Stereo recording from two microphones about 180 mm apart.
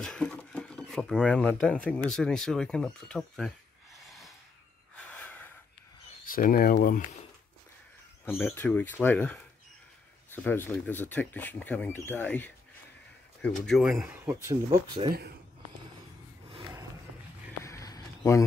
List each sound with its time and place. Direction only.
0.0 s speech: 5° left (ahead or behind)
4.9 s gasp: 5° left (ahead or behind)
6.2 s speech: 50° left (ahead or behind)
8.3 s speech: 10° left (ahead or behind)
17.6 s a sound: 20° left (ahead or behind)